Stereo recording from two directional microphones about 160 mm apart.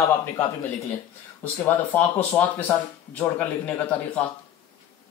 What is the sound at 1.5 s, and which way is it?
Speech, 15° left (ahead or behind).